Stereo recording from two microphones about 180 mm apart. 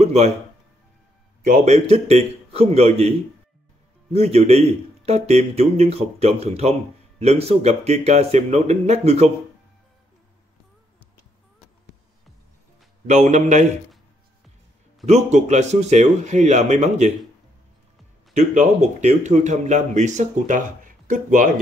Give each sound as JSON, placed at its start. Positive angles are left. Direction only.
{"t": 0.0, "sound": "a sound", "side_deg": -35}
{"t": 1.4, "sound": "speech", "side_deg": -40}
{"t": 13.0, "sound": "speech", "side_deg": -40}
{"t": 15.0, "sound": "speech", "side_deg": -40}
{"t": 18.3, "sound": "speech", "side_deg": -40}